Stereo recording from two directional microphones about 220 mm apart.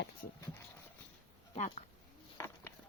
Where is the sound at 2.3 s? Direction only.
15° left (ahead or behind).